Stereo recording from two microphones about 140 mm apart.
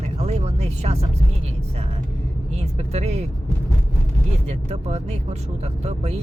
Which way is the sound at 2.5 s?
50° right (ahead or behind).